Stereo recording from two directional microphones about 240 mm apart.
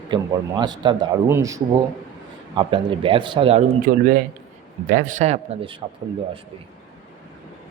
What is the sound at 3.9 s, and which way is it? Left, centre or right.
A man's voice, right.